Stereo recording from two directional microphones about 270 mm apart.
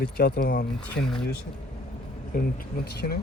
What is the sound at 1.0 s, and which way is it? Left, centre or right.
Speech, centre.